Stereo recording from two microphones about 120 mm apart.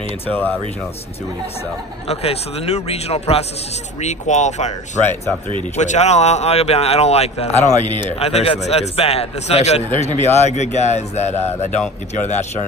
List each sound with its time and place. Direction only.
0.3 s speech: 15° left (ahead or behind)
2.0 s speech: 60° left (ahead or behind)
4.0 s speech: 75° left (ahead or behind)
8.1 s speech: 60° left (ahead or behind)